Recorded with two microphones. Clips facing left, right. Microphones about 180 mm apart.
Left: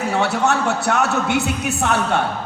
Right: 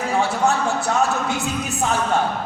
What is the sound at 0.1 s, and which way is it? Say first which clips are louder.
A man's voice: even; 70° left (ahead or behind).